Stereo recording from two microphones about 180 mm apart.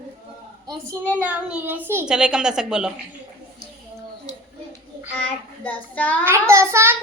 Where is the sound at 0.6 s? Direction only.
20° right (ahead or behind).